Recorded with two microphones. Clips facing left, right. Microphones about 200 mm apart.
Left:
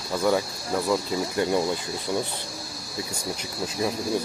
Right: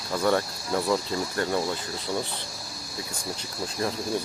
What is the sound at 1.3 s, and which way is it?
Speech, 15° left (ahead or behind).